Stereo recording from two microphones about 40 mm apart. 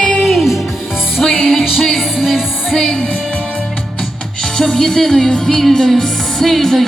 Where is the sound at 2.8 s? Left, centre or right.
Centre.